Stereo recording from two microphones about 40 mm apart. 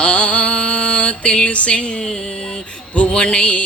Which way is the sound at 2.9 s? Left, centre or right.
Left.